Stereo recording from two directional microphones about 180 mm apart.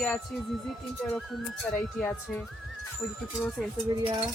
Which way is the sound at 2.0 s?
10° left (ahead or behind).